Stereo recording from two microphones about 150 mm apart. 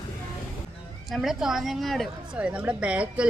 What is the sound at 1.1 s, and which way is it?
A woman's voice, centre (ahead or behind).